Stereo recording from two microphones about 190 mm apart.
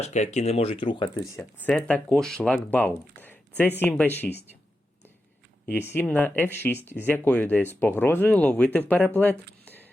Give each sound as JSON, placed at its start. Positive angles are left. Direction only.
{"t": 0.0, "sound": "speech", "side_deg": 35}
{"t": 1.4, "sound": "speech", "side_deg": 5}
{"t": 5.6, "sound": "speech", "side_deg": 10}